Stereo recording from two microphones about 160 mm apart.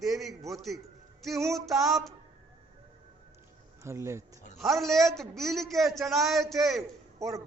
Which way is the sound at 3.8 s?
20° right (ahead or behind).